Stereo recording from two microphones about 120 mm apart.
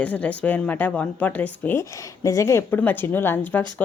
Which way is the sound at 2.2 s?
25° left (ahead or behind).